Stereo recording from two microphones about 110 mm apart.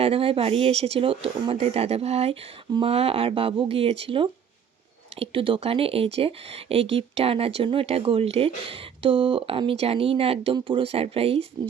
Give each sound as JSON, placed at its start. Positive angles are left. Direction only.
{"t": 0.0, "sound": "speech", "side_deg": -60}